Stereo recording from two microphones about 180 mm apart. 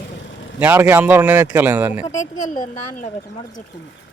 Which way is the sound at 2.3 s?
45° left (ahead or behind).